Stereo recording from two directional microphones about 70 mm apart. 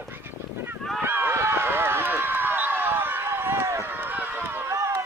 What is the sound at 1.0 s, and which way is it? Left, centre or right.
Run, right.